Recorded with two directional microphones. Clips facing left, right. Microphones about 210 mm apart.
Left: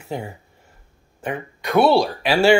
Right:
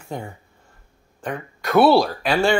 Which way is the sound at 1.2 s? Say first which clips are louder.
Left 1 dB; 5° left (ahead or behind).